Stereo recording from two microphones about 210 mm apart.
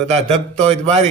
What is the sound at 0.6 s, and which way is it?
Speech, 30° right (ahead or behind).